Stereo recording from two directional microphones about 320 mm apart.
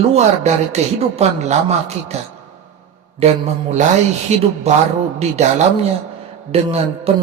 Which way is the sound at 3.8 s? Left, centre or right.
Right.